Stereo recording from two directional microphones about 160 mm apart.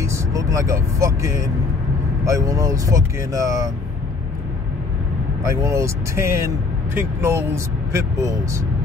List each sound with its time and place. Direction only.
0.0 s speech: 20° right (ahead or behind)
5.4 s speech: 20° right (ahead or behind)